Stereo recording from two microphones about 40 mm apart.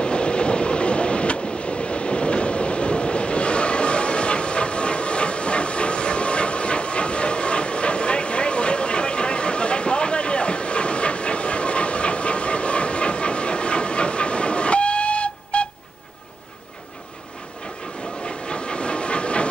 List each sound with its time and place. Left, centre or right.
0.0 s train: left
18.2 s train: left